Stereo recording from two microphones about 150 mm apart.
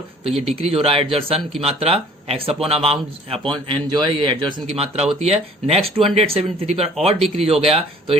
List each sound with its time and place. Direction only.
0.3 s speech: 40° right (ahead or behind)